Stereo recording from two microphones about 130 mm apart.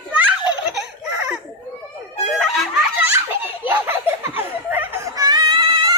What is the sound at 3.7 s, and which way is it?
Music, 15° right (ahead or behind).